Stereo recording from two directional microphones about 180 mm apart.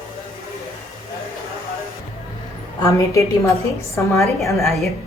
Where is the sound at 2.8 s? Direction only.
15° left (ahead or behind).